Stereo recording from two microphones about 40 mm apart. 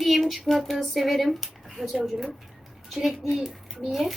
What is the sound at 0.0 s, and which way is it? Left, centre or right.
Speech, centre.